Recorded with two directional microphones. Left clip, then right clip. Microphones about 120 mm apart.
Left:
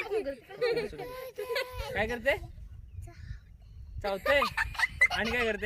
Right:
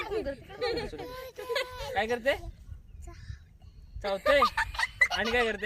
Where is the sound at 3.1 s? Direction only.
25° left (ahead or behind).